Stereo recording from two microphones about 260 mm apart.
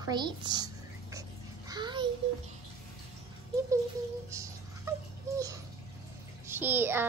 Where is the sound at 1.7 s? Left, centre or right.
Centre.